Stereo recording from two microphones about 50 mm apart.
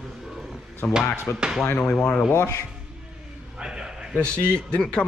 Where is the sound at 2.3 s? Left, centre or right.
Left.